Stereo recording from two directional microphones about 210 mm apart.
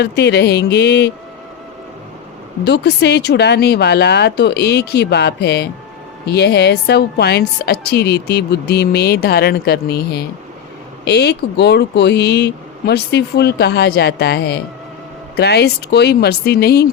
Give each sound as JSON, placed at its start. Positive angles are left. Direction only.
{"t": 0.0, "sound": "a woman's voice", "side_deg": 55}
{"t": 2.6, "sound": "a woman's voice", "side_deg": 55}